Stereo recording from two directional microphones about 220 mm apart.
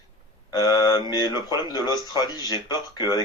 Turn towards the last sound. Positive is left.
turn(degrees=20)  # may be behind; listen again after turning